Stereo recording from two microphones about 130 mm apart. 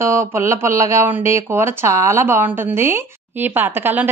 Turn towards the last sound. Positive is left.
turn(degrees=-15)  # may be behind; listen again after turning